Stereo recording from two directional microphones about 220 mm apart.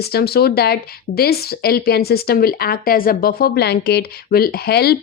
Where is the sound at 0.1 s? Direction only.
45° left (ahead or behind).